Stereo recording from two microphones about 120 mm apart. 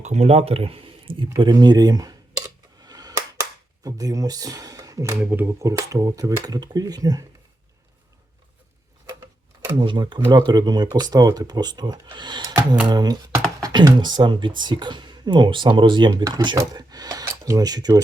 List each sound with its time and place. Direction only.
0.0 s speech: 70° right (ahead or behind); by 1.3 s 45° right (ahead or behind)
1.4 s speech: 35° right (ahead or behind)
2.8 s a sound: 35° right (ahead or behind)
3.8 s speech: 30° right (ahead or behind)
5.2 s speech: 15° right (ahead or behind); by 7.3 s 30° right (ahead or behind)
9.7 s speech: 40° right (ahead or behind)